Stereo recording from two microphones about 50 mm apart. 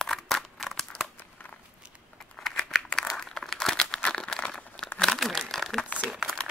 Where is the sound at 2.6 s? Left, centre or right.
Centre.